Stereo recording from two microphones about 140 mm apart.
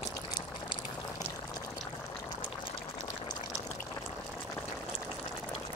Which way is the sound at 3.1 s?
30° left (ahead or behind).